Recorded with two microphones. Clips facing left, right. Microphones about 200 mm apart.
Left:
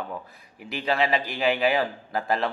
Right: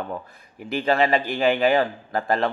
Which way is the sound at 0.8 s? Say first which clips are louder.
Right 4 dB; 50° right (ahead or behind).